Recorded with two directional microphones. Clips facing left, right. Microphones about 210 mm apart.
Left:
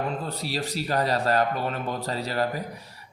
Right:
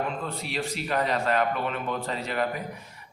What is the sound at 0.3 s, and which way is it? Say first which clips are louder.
A man's voice: left 1 dB; 35° left (ahead or behind).